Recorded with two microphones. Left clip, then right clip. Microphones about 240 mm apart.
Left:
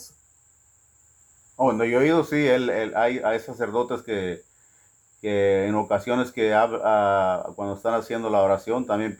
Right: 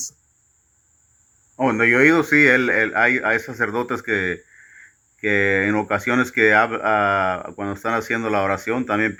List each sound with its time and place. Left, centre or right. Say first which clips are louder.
1.8 s speech: right 9 dB; centre